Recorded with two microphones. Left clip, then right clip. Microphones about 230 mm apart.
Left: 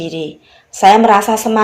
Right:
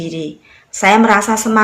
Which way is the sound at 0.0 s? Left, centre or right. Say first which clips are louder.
Left 2 dB; centre.